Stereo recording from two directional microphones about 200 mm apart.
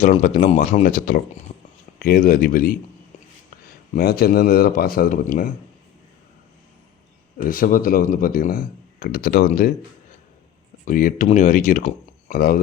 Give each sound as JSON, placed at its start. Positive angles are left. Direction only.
{"t": 0.0, "sound": "speech", "side_deg": 40}
{"t": 3.9, "sound": "speech", "side_deg": 50}
{"t": 7.4, "sound": "speech", "side_deg": 45}
{"t": 10.8, "sound": "speech", "side_deg": 40}